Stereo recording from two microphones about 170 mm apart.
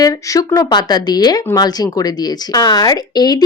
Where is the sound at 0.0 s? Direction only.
20° left (ahead or behind).